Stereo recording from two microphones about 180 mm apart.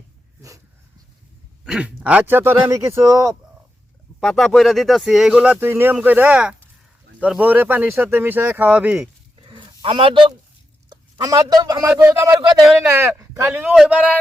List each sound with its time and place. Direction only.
1.6 s speech: 5° right (ahead or behind)
4.2 s speech: centre (ahead or behind)
9.4 s a sound: 30° right (ahead or behind)
10.8 s a man's voice: 20° right (ahead or behind)